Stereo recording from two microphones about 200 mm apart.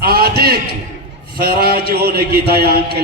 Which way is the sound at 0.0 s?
50° right (ahead or behind).